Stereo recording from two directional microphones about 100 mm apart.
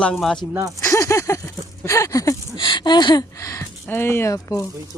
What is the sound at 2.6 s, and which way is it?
Speech, 50° left (ahead or behind).